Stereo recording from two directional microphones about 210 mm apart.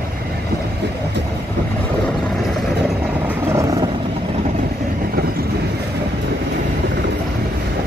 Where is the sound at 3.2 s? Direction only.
15° right (ahead or behind).